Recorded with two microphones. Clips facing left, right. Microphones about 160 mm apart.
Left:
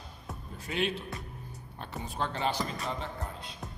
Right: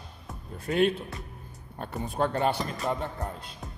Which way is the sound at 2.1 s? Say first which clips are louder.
Right 5 dB; 45° right (ahead or behind).